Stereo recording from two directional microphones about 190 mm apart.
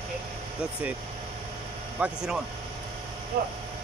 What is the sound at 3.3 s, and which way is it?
Speech, 55° right (ahead or behind).